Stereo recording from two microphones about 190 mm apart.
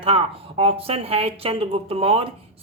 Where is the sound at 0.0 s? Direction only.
30° right (ahead or behind).